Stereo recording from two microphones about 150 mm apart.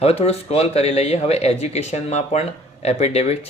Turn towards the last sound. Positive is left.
turn(degrees=45)  # may be behind; listen again after turning